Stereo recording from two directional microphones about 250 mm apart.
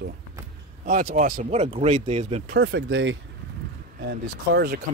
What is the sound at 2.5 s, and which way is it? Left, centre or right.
Speech, right.